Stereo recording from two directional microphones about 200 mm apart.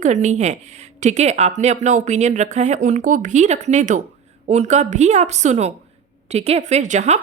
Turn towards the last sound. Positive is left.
turn(degrees=-35)  # may be behind; listen again after turning